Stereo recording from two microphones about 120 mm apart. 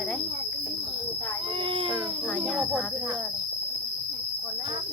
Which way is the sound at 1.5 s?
45° right (ahead or behind).